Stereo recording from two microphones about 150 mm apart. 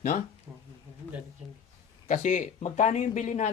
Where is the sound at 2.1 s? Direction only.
55° left (ahead or behind).